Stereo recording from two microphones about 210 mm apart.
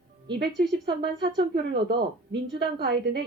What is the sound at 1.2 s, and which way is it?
A woman's voice, 55° right (ahead or behind).